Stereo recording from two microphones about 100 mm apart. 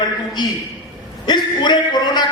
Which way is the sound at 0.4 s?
50° left (ahead or behind).